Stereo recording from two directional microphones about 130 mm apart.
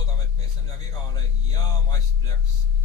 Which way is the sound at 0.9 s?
30° left (ahead or behind).